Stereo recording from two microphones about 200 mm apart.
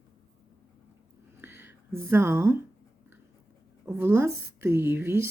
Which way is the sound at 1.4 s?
10° right (ahead or behind).